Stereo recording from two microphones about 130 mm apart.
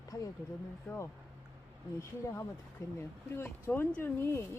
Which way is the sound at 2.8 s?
25° left (ahead or behind).